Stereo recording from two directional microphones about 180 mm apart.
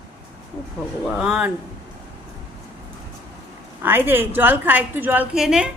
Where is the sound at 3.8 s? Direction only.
10° right (ahead or behind).